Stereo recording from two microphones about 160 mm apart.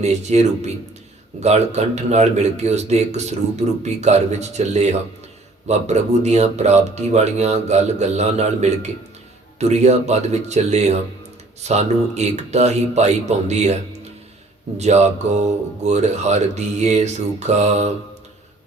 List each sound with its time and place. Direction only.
0.0 s speech: 45° right (ahead or behind)